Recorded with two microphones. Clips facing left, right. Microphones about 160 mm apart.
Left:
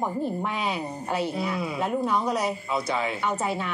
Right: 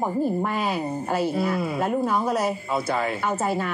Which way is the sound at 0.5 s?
5° right (ahead or behind).